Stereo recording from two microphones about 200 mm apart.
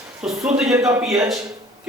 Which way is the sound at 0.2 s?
5° right (ahead or behind).